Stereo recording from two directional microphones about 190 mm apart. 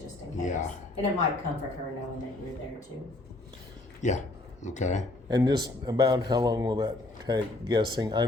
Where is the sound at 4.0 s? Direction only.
40° left (ahead or behind).